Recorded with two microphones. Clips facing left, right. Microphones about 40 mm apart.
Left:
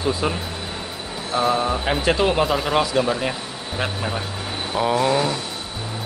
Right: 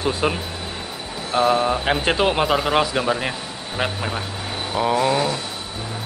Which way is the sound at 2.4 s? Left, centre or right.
Centre.